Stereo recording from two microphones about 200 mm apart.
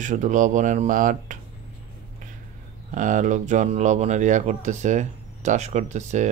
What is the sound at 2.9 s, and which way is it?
Speech, 40° right (ahead or behind).